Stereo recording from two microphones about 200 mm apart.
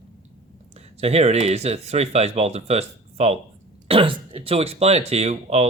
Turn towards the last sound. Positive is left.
turn(degrees=-35)  # may be behind; listen again after turning